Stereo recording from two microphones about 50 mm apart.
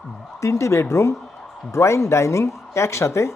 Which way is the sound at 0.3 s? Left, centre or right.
Left.